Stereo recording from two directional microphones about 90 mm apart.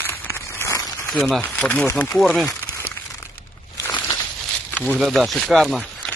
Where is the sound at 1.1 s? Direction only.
Centre (ahead or behind).